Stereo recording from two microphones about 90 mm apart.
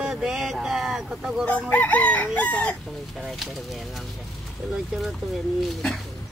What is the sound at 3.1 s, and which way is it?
Speech, centre (ahead or behind).